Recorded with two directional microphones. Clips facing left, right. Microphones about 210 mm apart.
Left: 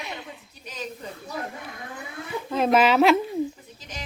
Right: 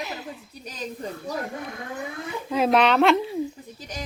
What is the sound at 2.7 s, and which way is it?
Speech, 5° left (ahead or behind).